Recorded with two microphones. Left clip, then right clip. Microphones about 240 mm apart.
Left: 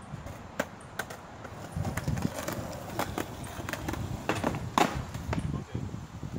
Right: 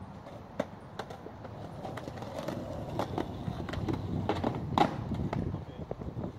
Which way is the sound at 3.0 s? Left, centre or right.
Centre.